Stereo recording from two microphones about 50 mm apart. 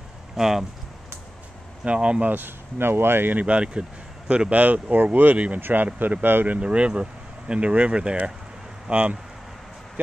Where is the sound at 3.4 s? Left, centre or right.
Right.